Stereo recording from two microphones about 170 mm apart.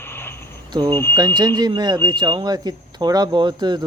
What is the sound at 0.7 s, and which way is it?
Speech, 25° right (ahead or behind).